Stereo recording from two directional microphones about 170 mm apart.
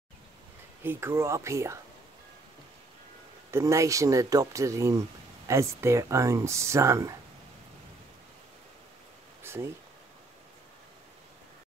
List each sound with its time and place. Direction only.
0.8 s speech: 15° right (ahead or behind)
3.5 s speech: 15° right (ahead or behind)
9.4 s a sound: 15° right (ahead or behind)